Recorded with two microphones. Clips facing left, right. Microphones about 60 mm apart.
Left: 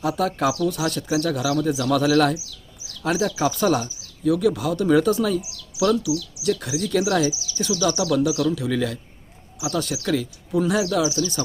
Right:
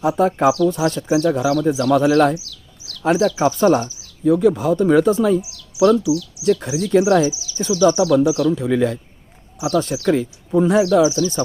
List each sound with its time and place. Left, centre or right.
0.0 s speech: right
2.4 s bird: centre
3.2 s speech: centre
4.2 s speech: right